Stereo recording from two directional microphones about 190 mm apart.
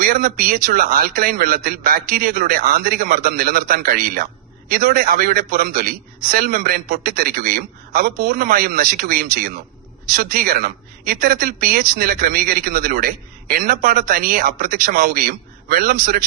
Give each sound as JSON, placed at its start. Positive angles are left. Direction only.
{"t": 0.0, "sound": "speech", "side_deg": -50}